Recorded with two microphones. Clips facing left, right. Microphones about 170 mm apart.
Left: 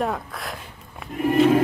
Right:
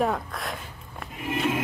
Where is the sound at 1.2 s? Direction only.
45° left (ahead or behind).